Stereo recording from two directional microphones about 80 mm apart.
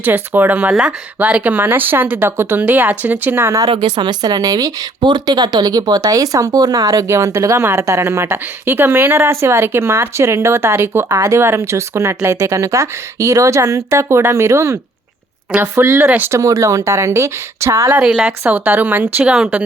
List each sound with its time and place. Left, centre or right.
0.0 s speech: right
0.7 s speech: centre
1.2 s speech: right
3.8 s speech: right
4.9 s speech: right
16.0 s speech: right
16.3 s speech: right
17.9 s speech: centre